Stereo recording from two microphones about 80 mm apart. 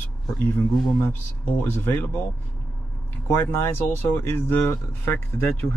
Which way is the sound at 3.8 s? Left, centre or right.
Left.